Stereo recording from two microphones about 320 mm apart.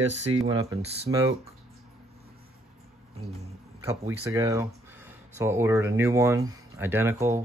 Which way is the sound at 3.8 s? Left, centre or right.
Centre.